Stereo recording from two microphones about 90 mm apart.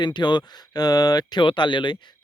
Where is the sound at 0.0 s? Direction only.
55° left (ahead or behind).